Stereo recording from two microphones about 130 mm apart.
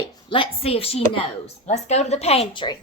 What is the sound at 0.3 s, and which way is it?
Speech, 45° left (ahead or behind).